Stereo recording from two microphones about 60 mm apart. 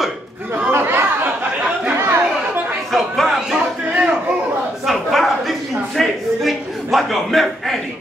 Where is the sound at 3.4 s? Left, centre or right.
Centre.